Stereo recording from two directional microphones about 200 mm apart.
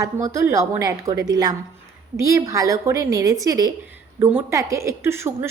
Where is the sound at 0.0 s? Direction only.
15° right (ahead or behind).